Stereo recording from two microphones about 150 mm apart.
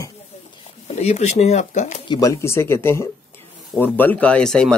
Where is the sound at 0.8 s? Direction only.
45° left (ahead or behind).